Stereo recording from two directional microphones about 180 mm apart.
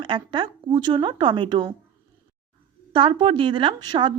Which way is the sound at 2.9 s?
30° right (ahead or behind).